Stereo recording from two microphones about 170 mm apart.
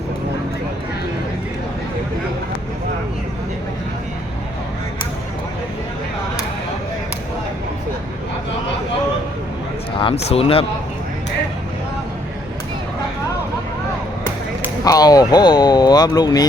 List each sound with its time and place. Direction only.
10.0 s speech: 35° left (ahead or behind)
14.8 s speech: 20° left (ahead or behind)